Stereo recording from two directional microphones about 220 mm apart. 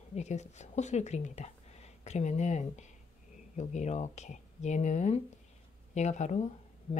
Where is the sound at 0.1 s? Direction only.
30° left (ahead or behind).